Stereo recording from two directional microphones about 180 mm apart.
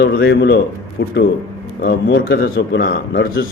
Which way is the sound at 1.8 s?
75° left (ahead or behind).